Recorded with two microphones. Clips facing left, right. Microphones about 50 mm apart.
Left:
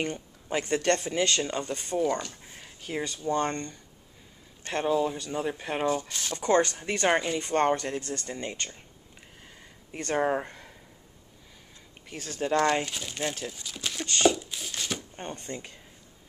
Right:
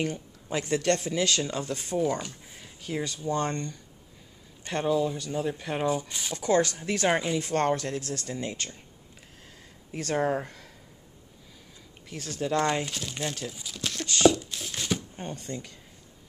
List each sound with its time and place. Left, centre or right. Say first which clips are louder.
0.5 s speech: even; left
1.6 s speech: even; centre
2.5 s a sound: right 1 dB; centre
3.3 s speech: left 1 dB; centre
6.4 s speech: left 1 dB; left
6.8 s speech: even; centre
7.3 s speech: left 1 dB; centre
9.9 s speech: even; centre
12.1 s speech: left 1 dB; centre
13.5 s speech: right 1 dB; centre
14.7 s a sound: right 4 dB; centre
15.2 s speech: even; centre